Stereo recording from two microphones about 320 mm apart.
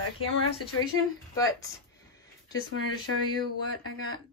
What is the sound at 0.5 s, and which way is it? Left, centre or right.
Speech, left.